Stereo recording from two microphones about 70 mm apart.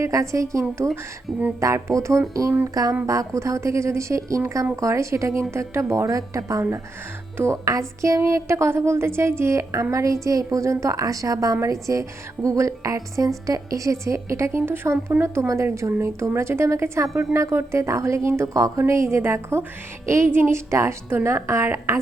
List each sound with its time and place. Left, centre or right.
0.0 s a woman's voice: right
1.3 s speech: centre
1.6 s a woman's voice: right
2.8 s a woman's voice: right